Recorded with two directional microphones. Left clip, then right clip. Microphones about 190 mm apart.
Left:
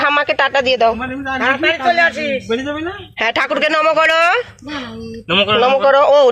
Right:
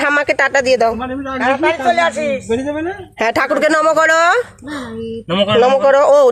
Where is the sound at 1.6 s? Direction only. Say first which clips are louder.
Left 1 dB; 45° left (ahead or behind).